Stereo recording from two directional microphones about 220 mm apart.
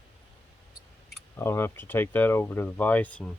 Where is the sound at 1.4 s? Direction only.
10° left (ahead or behind).